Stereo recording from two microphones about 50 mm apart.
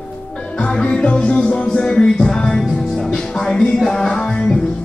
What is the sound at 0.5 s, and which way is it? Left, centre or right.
Music, left.